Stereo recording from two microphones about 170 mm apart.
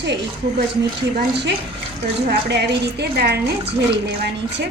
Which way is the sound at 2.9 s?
70° right (ahead or behind).